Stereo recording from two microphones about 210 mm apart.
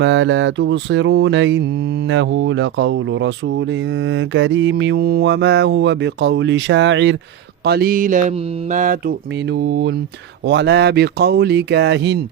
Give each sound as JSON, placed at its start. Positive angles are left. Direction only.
{"t": 0.0, "sound": "mantra", "side_deg": -60}
{"t": 7.6, "sound": "mantra", "side_deg": -50}